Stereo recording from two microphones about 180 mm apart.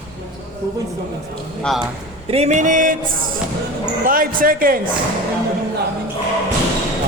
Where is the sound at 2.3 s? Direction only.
35° right (ahead or behind).